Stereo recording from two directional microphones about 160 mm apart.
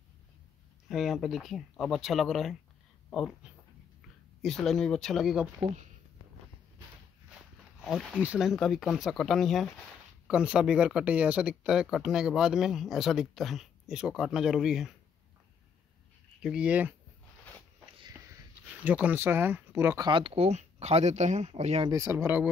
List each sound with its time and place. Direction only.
0.8 s speech: centre (ahead or behind)
7.8 s speech: centre (ahead or behind)
16.4 s speech: 5° right (ahead or behind)
18.9 s speech: 10° right (ahead or behind)
20.1 s speech: 30° right (ahead or behind)
21.8 s speech: 20° right (ahead or behind)